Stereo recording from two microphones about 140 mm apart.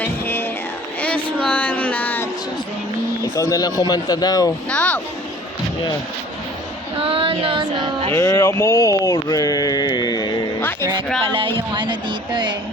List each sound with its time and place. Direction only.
0.0 s music: 15° left (ahead or behind)
1.0 s a sound: 5° left (ahead or behind)
3.3 s speech: 25° left (ahead or behind)
4.7 s speech: 10° left (ahead or behind)
6.9 s child singing: 40° right (ahead or behind)
8.1 s speech: 20° left (ahead or behind)
10.6 s music: 15° left (ahead or behind)
11.2 s a sound: 40° right (ahead or behind)